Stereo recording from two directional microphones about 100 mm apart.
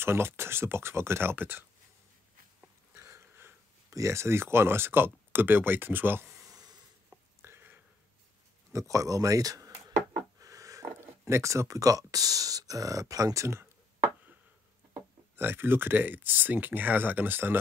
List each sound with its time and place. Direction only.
0.0 s speech: 25° right (ahead or behind)
2.9 s speech: 25° right (ahead or behind)
6.4 s a sound: 40° right (ahead or behind)
7.4 s a sound: 20° right (ahead or behind)
8.7 s speech: 35° right (ahead or behind)
15.3 s speech: 20° right (ahead or behind)